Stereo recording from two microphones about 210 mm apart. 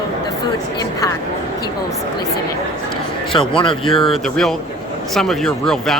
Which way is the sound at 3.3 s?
25° left (ahead or behind).